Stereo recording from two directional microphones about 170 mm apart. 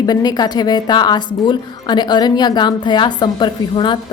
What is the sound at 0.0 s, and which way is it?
A woman's voice, 25° left (ahead or behind).